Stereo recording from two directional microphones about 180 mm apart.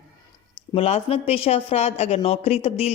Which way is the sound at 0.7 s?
30° left (ahead or behind).